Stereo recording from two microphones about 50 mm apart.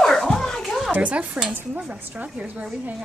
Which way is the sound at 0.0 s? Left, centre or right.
Centre.